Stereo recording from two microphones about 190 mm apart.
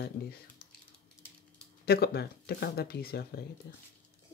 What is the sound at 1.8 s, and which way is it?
Speech, 55° left (ahead or behind).